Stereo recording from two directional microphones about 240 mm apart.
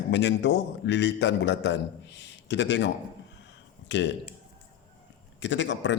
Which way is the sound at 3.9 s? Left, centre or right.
Left.